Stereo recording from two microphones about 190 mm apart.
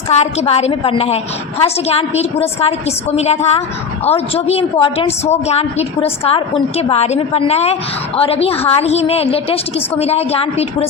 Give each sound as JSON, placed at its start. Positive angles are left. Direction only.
{"t": 0.1, "sound": "a woman's voice", "side_deg": 35}